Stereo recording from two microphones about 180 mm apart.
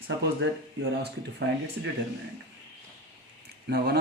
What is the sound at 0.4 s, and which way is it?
Speech, 90° right.